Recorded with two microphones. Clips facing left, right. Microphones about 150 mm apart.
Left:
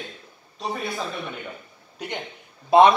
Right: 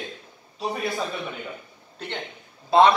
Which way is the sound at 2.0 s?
10° left (ahead or behind).